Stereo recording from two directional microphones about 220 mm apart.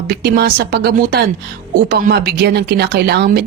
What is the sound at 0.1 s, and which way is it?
A man's voice, 45° right (ahead or behind).